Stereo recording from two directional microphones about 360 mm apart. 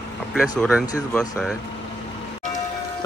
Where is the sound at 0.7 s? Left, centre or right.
Centre.